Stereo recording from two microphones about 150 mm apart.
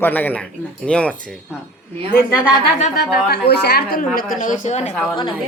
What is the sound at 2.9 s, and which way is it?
A woman's voice, 90° left.